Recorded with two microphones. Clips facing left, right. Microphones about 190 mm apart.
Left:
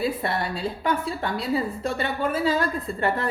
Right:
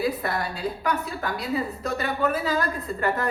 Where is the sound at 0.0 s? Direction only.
25° left (ahead or behind).